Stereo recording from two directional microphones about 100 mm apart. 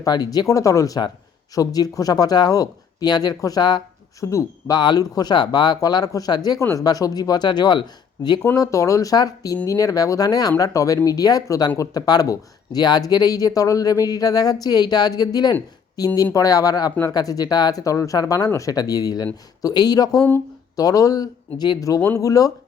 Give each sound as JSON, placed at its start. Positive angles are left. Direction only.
{"t": 0.0, "sound": "speech", "side_deg": 40}
{"t": 6.6, "sound": "speech", "side_deg": 30}
{"t": 6.8, "sound": "speech", "side_deg": 40}
{"t": 8.5, "sound": "speech", "side_deg": 35}